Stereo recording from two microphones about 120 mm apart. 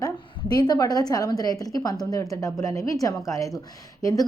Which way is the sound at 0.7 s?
30° left (ahead or behind).